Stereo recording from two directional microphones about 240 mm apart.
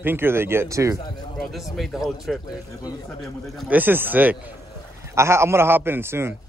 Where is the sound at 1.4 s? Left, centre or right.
Centre.